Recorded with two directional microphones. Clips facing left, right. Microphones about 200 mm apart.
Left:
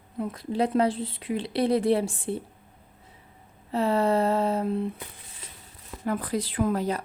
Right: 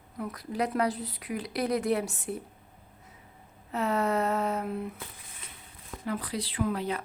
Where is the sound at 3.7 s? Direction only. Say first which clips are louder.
Left 5 dB; 30° left (ahead or behind).